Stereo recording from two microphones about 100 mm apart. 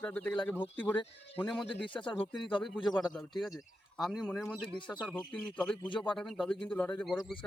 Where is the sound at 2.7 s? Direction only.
45° left (ahead or behind).